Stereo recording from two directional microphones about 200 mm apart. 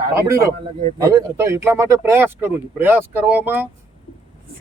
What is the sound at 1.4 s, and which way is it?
Speech, 15° right (ahead or behind).